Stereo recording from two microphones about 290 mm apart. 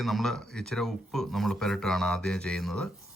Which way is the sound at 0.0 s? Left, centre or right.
Centre.